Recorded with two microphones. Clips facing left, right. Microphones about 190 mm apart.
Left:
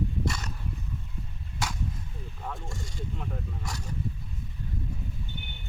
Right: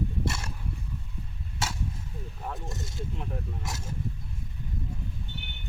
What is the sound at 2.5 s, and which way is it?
Speech, 20° right (ahead or behind).